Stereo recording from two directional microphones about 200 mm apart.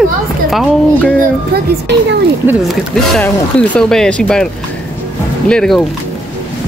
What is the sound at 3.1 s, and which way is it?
Speech, 5° left (ahead or behind).